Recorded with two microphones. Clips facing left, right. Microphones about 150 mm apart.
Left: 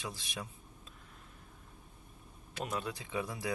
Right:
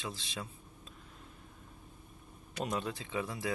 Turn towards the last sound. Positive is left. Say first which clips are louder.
# right 1 dB
turn(degrees=15)  # may be behind; listen again after turning